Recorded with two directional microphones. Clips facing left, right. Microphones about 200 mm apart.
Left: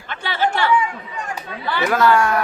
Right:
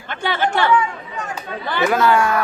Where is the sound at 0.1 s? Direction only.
50° right (ahead or behind).